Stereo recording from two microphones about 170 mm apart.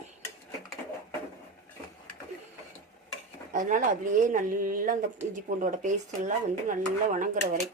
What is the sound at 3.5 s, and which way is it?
Speech, 50° right (ahead or behind).